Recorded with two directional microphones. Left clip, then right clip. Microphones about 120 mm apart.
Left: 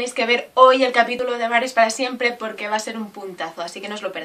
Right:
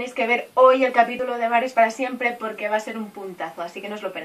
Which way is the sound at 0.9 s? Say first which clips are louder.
Left 1 dB; 25° left (ahead or behind).